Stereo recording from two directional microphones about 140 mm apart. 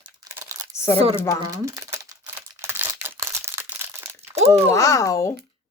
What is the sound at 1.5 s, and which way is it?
Crumpling, 25° right (ahead or behind).